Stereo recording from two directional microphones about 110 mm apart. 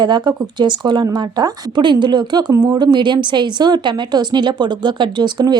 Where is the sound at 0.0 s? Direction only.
45° right (ahead or behind).